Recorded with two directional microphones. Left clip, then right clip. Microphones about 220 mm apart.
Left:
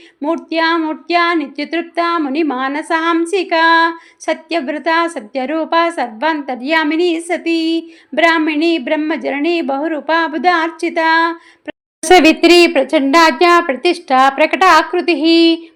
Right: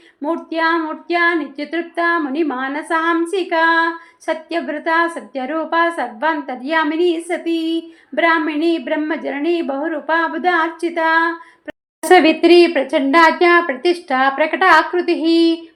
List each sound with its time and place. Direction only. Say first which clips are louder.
0.2 s speech: left 3 dB; 35° left (ahead or behind)